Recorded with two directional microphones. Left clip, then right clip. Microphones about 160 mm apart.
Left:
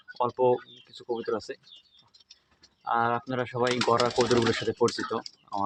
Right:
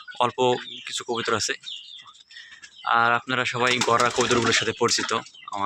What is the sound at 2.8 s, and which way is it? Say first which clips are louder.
Speech: right 6 dB; 10° left (ahead or behind).